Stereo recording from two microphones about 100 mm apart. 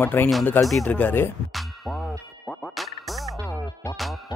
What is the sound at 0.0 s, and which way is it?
Speech, 20° left (ahead or behind).